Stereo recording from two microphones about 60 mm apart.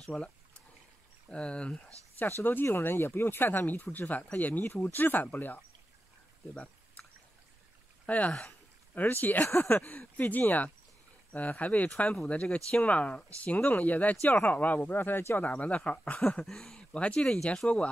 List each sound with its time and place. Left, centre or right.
0.1 s speech: centre
1.3 s speech: centre
2.1 s speech: left
6.5 s a sound: left
8.3 s speech: centre
8.9 s speech: left
9.4 s speech: left
9.7 s speech: left
12.3 s speech: centre; by 15.4 s left
15.4 s speech: left
16.4 s speech: centre
16.9 s speech: centre